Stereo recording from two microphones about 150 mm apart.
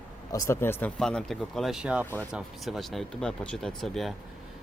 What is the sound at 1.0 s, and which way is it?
Speech, 5° left (ahead or behind).